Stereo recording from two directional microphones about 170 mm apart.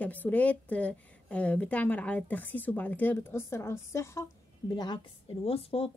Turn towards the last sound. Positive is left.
turn(degrees=35)  # may be behind; listen again after turning